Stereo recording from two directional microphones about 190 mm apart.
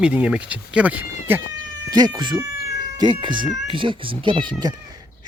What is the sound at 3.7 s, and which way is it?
Speech, 25° right (ahead or behind).